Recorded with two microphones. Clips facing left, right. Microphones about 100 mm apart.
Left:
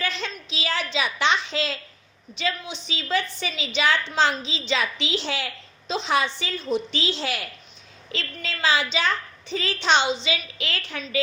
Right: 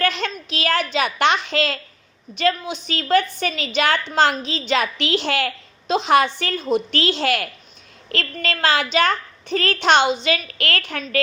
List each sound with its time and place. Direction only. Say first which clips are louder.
0.0 s a woman's voice: right 7 dB; 60° right (ahead or behind)